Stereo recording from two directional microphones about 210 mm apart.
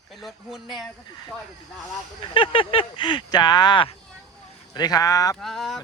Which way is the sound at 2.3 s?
25° left (ahead or behind).